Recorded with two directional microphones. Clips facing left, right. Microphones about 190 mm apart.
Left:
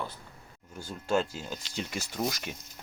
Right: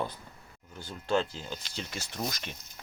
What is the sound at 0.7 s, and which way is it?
Speech, 10° left (ahead or behind).